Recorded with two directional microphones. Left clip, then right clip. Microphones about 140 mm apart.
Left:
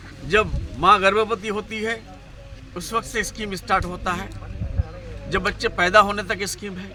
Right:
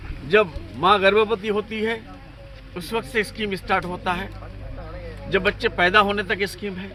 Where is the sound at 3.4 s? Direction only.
30° left (ahead or behind).